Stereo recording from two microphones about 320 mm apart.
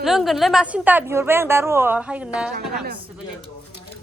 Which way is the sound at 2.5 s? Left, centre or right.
Right.